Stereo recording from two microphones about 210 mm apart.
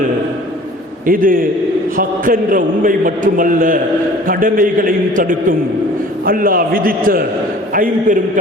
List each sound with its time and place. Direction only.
1.0 s a man's voice: 40° right (ahead or behind)